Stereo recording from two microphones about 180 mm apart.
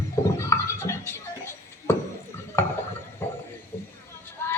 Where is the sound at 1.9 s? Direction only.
15° left (ahead or behind).